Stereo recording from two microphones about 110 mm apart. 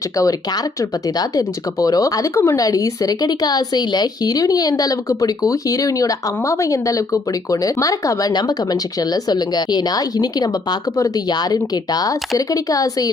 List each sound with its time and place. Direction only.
0.2 s speech: 35° left (ahead or behind)